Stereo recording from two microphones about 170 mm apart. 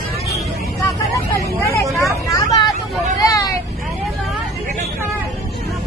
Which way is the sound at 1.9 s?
20° left (ahead or behind).